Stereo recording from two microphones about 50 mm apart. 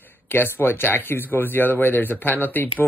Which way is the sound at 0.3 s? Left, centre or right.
Left.